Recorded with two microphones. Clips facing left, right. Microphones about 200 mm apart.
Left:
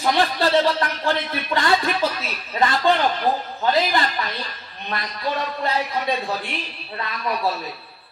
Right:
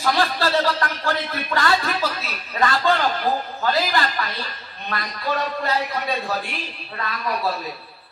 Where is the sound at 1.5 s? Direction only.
20° left (ahead or behind).